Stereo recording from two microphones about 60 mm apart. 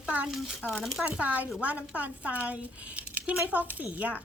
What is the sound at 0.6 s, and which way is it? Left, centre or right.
Speech, left.